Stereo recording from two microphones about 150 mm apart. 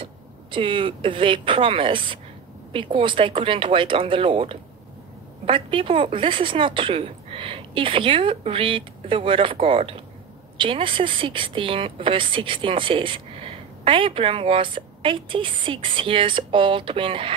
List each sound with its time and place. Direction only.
0.0 s speech: 35° right (ahead or behind)